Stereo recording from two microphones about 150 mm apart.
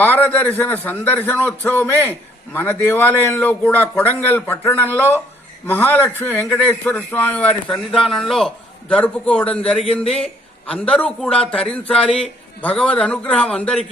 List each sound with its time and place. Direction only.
0.0 s a man's voice: 10° left (ahead or behind)